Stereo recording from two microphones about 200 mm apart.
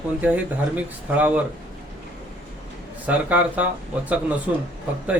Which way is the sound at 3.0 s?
10° right (ahead or behind).